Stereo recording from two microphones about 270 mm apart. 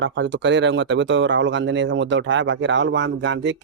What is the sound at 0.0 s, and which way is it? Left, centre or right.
Speech, right.